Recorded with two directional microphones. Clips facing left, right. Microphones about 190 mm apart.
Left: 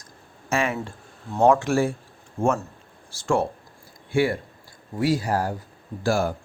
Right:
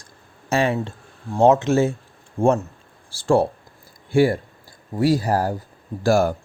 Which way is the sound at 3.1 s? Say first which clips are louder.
Right 5 dB; 35° right (ahead or behind).